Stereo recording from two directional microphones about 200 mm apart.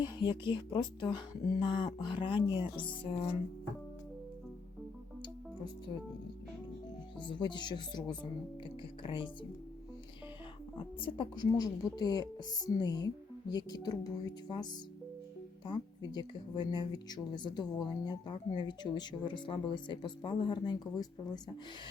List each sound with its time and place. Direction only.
0.0 s speech: 20° left (ahead or behind)
7.3 s speech: 25° left (ahead or behind)
11.0 s speech: 25° left (ahead or behind)